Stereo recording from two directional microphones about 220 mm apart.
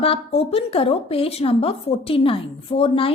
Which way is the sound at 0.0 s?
25° left (ahead or behind).